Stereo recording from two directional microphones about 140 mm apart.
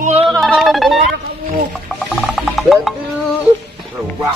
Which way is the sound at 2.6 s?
Centre (ahead or behind).